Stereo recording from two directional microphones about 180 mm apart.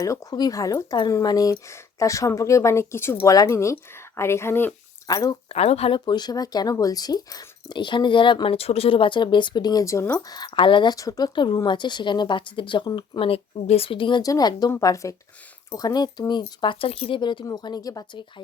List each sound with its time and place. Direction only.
0.0 s speech: 20° left (ahead or behind)